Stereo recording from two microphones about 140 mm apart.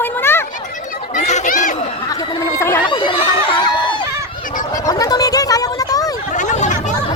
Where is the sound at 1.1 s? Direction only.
55° left (ahead or behind).